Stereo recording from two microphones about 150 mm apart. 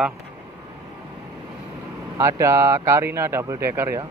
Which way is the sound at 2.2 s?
20° right (ahead or behind).